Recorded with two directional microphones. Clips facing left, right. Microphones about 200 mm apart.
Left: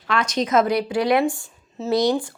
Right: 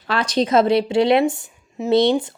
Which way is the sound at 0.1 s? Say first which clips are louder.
Right 3 dB; 35° right (ahead or behind).